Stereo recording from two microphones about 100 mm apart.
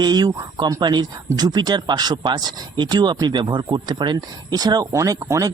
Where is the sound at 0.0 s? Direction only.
45° right (ahead or behind).